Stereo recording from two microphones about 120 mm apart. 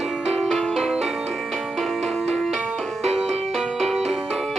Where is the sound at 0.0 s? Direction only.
Centre (ahead or behind).